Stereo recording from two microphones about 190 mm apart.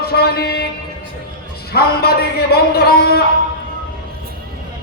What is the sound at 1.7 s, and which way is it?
A man's voice, 55° left (ahead or behind).